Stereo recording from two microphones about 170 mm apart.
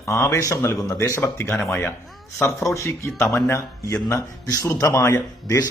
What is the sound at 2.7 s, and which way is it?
A man's voice, 15° left (ahead or behind).